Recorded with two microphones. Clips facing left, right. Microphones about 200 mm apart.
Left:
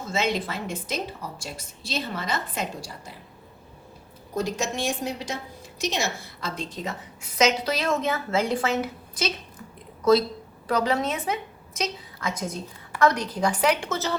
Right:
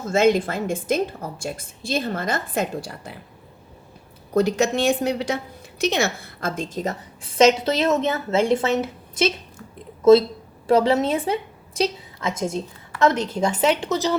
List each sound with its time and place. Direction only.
0.0 s a woman's voice: 50° right (ahead or behind)
4.4 s a woman's voice: 65° right (ahead or behind); by 14.2 s 15° right (ahead or behind)